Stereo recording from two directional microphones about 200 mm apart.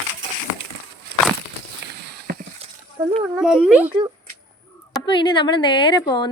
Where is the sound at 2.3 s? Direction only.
50° right (ahead or behind).